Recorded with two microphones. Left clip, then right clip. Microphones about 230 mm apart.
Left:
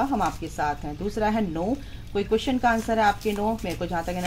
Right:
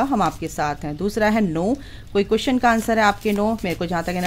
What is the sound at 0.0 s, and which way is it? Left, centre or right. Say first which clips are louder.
Speech: right 5 dB; right.